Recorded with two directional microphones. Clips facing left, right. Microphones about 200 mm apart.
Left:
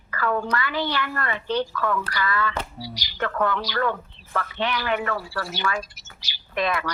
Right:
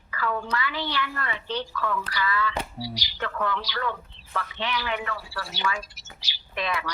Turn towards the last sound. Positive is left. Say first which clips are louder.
# left 5 dB
turn(degrees=50)  # may be behind; listen again after turning